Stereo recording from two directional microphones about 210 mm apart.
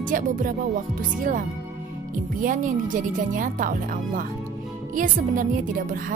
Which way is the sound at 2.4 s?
40° right (ahead or behind).